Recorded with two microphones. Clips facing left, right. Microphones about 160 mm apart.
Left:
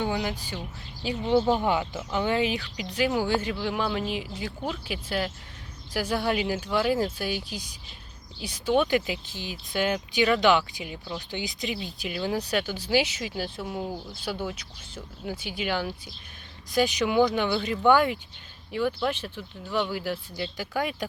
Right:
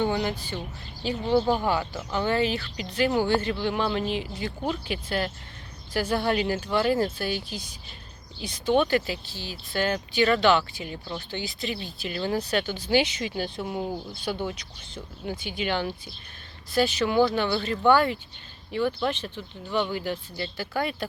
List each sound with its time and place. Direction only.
0.0 s speech: 5° left (ahead or behind)